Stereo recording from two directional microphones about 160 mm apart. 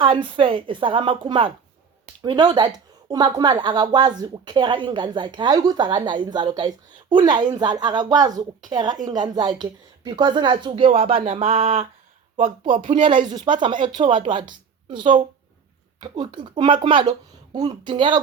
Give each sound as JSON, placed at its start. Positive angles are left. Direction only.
{"t": 0.0, "sound": "speech", "side_deg": -35}